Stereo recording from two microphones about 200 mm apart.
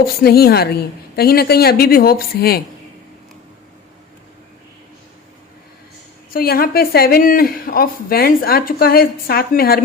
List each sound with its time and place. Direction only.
0.0 s a woman's voice: 50° left (ahead or behind)
6.3 s a woman's voice: 50° left (ahead or behind)